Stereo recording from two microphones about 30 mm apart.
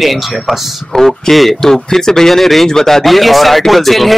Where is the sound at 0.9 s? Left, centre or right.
Left.